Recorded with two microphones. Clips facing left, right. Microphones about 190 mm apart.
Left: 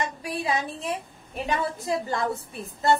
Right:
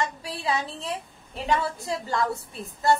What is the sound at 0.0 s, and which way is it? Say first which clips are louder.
A woman's voice: even; 15° left (ahead or behind).